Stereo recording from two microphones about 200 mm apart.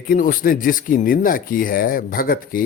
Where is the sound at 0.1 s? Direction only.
45° left (ahead or behind).